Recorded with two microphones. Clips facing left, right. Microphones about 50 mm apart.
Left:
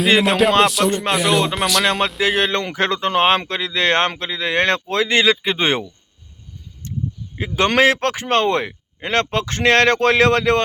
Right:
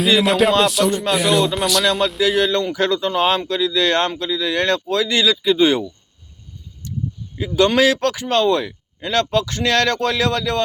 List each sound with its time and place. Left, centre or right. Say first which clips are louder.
0.2 s speech: even; centre
0.9 s speech: even; left
1.1 s speech: right 1 dB; centre
2.2 s speech: right 2 dB; left
6.8 s a sound: even; left
7.3 s speech: right 1 dB; left